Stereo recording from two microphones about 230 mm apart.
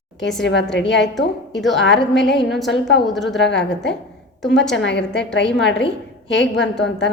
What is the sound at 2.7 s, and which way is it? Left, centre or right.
Speech, left.